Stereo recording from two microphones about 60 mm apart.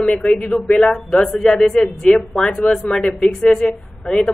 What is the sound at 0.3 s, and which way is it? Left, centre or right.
Speech, centre.